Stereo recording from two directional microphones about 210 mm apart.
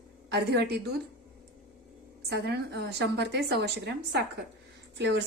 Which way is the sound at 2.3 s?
55° right (ahead or behind).